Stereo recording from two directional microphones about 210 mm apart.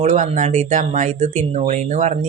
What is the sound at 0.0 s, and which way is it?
Speech, 35° right (ahead or behind).